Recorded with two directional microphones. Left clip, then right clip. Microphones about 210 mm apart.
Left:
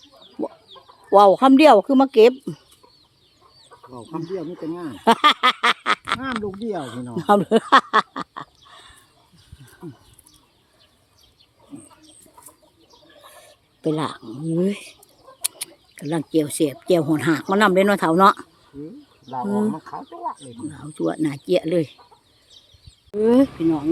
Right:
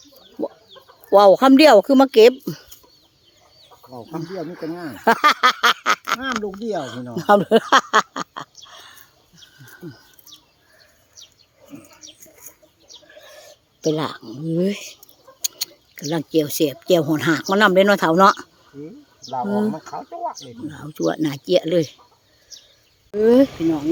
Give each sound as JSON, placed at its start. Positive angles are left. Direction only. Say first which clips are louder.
{"t": 0.4, "sound": "chicken", "louder": "right 2 dB", "side_deg": 0}
{"t": 1.1, "sound": "speech", "louder": "right 1 dB", "side_deg": -10}
{"t": 4.2, "sound": "speech", "louder": "even", "side_deg": -5}
{"t": 13.1, "sound": "a sound", "louder": "right 1 dB", "side_deg": 0}
{"t": 15.4, "sound": "speech", "louder": "right 5 dB", "side_deg": 0}
{"t": 23.1, "sound": "speech", "louder": "right 3 dB", "side_deg": 0}
{"t": 23.5, "sound": "speech", "louder": "even", "side_deg": -40}